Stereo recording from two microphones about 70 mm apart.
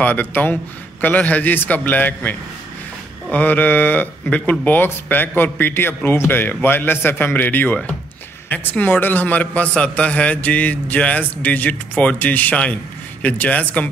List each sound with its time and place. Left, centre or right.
0.0 s speech: left